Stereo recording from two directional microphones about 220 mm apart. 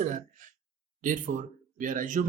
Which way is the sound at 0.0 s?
35° right (ahead or behind).